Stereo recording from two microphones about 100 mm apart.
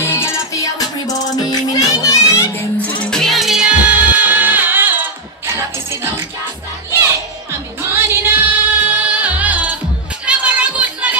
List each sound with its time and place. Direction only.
0.0 s music: 25° left (ahead or behind)
3.0 s music: 5° left (ahead or behind); by 6.2 s 25° right (ahead or behind)
7.8 s music: 25° right (ahead or behind)